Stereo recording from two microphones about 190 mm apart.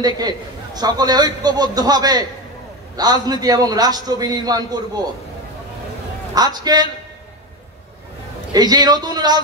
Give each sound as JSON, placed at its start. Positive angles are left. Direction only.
{"t": 0.0, "sound": "a man's voice", "side_deg": -20}
{"t": 6.3, "sound": "a man's voice", "side_deg": -20}
{"t": 8.5, "sound": "a man's voice", "side_deg": -20}